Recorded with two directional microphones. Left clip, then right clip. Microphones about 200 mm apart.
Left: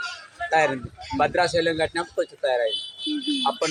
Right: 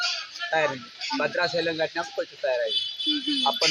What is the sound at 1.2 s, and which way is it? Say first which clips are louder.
Speech: left 5 dB; 25° left (ahead or behind).